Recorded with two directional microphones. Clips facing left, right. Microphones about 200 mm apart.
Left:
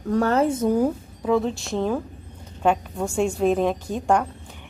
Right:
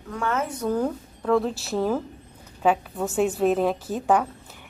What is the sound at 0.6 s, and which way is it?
A woman's voice, 10° left (ahead or behind).